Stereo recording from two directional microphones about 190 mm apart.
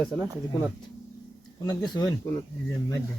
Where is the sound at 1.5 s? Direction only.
20° left (ahead or behind).